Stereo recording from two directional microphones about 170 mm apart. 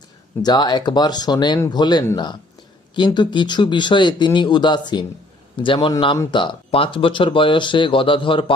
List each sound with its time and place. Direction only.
0.4 s speech: 25° left (ahead or behind)